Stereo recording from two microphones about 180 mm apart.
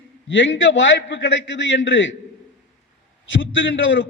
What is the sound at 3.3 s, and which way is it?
Speech, 90° left.